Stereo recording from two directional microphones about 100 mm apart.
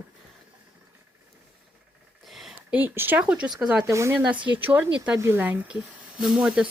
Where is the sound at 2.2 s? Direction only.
Centre (ahead or behind).